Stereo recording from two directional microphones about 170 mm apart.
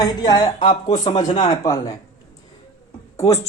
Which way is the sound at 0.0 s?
25° left (ahead or behind).